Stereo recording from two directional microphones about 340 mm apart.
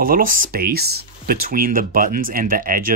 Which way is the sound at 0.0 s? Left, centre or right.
Right.